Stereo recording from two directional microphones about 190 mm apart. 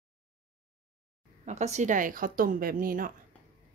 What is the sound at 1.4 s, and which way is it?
Speech, 35° right (ahead or behind).